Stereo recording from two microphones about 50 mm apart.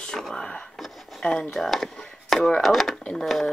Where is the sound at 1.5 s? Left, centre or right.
Centre.